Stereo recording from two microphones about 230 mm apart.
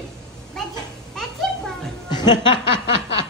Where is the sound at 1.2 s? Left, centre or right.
Centre.